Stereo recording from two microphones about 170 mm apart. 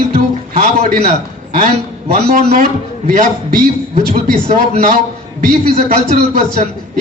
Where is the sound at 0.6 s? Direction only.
50° right (ahead or behind).